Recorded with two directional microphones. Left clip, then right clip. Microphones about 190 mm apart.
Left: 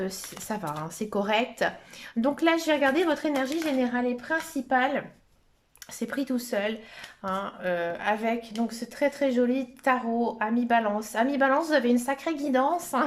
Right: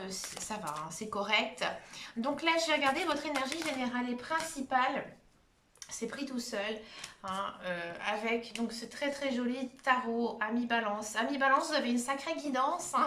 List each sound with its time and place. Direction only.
0.4 s speech: 40° left (ahead or behind)
6.0 s speech: 40° left (ahead or behind)